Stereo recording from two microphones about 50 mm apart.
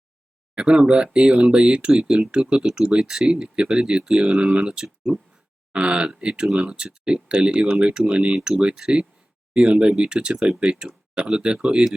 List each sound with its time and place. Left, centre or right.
0.5 s speech: centre
9.6 s speech: right
10.3 s speech: centre
10.6 s speech: centre